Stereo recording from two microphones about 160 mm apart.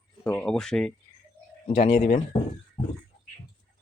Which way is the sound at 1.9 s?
50° left (ahead or behind).